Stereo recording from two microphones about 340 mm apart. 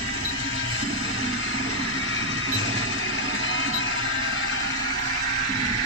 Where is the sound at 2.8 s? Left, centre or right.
Left.